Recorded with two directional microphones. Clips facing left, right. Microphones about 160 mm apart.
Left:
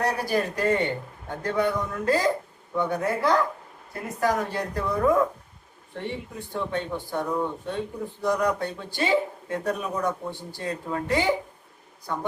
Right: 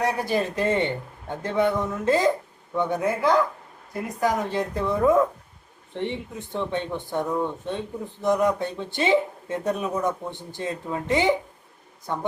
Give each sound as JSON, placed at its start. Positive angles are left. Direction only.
{"t": 0.0, "sound": "a man's voice", "side_deg": -25}